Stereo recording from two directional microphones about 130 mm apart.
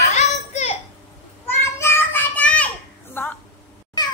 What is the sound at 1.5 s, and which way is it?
Children playing, 20° left (ahead or behind).